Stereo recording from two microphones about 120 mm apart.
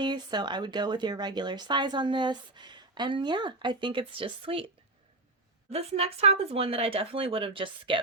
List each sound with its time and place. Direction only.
0.0 s speech: 40° right (ahead or behind)
5.7 s speech: 60° right (ahead or behind)